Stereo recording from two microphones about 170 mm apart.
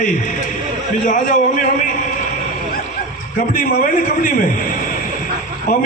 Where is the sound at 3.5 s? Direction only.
60° left (ahead or behind).